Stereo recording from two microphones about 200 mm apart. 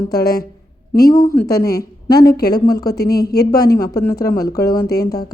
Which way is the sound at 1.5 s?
50° left (ahead or behind).